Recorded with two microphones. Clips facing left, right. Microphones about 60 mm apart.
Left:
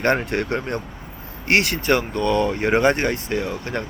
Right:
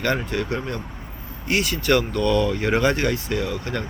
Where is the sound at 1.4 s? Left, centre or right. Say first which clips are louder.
Left 4 dB; left.